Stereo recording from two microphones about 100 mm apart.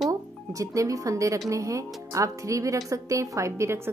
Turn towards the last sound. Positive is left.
turn(degrees=-25)  # may be behind; listen again after turning